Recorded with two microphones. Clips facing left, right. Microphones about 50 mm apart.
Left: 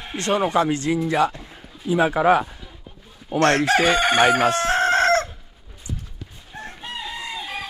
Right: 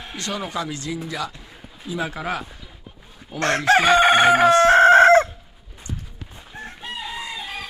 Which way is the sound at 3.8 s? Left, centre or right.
Right.